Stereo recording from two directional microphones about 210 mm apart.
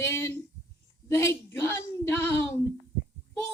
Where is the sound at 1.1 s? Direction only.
15° left (ahead or behind).